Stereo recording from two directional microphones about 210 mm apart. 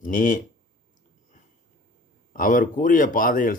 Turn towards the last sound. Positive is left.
turn(degrees=40)  # may be behind; listen again after turning